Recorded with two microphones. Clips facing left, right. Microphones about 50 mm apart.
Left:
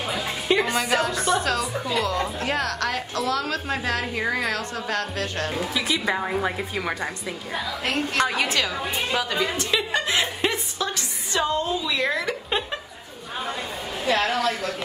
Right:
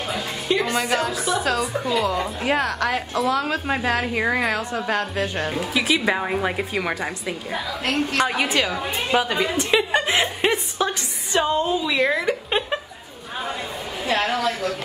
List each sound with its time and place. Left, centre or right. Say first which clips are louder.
0.5 s music: even; centre
0.7 s a woman's voice: right 1 dB; centre
5.5 s speech: right 1 dB; centre
6.0 s a woman's voice: right 2 dB; centre
6.8 s a woman's voice: right 2 dB; centre
9.6 s chuckle: right 4 dB; right
11.3 s a woman's voice: right 3 dB; right
14.0 s a woman's voice: even; right